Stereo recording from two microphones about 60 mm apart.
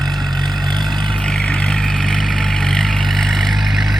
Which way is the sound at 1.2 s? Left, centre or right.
Centre.